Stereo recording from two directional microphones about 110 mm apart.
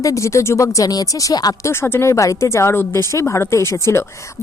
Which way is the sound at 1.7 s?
20° left (ahead or behind).